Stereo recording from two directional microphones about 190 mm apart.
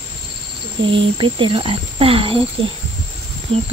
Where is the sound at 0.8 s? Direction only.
25° right (ahead or behind).